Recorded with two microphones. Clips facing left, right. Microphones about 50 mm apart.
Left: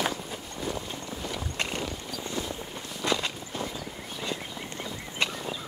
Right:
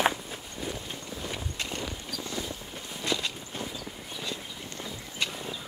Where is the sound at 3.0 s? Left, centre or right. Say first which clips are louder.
Left 3 dB; left.